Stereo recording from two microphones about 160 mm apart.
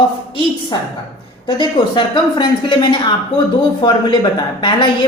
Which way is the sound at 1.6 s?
30° left (ahead or behind).